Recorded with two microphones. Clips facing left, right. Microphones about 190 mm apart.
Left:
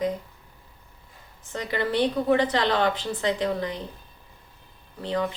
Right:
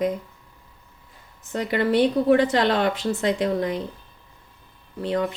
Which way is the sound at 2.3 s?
50° right (ahead or behind).